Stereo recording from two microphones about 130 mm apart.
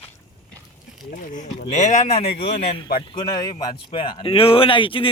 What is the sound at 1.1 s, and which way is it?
Speech, 75° left (ahead or behind).